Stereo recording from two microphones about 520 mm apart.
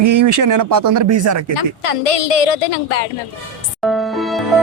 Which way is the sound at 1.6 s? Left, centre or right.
Left.